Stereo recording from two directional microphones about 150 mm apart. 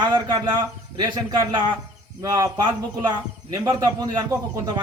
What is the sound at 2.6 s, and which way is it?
A man's voice, 30° right (ahead or behind).